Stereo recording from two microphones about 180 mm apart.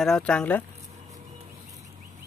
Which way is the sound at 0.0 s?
5° left (ahead or behind).